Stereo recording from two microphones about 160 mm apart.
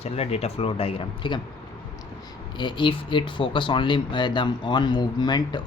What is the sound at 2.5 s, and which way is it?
Speech, 30° left (ahead or behind).